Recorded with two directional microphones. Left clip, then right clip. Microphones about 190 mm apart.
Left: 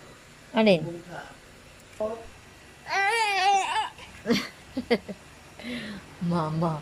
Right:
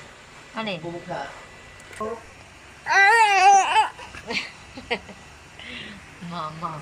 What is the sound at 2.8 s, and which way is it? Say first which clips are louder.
Babbling: right 9 dB; 10° left (ahead or behind).